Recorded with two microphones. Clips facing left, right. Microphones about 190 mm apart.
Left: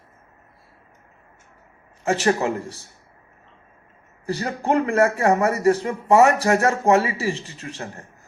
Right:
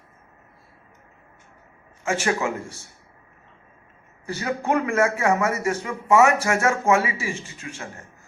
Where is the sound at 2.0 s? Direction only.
35° left (ahead or behind).